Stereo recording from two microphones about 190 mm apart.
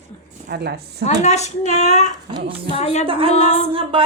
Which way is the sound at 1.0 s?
35° left (ahead or behind).